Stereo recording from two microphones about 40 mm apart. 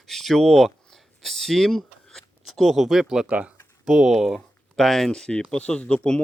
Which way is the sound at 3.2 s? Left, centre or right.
Right.